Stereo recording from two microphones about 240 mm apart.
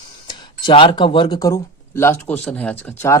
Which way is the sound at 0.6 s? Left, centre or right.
Centre.